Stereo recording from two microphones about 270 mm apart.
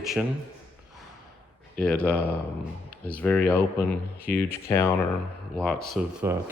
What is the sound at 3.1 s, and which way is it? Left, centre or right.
Speech, centre.